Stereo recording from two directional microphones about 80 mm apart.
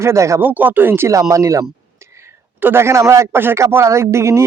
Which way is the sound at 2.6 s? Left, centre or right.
Right.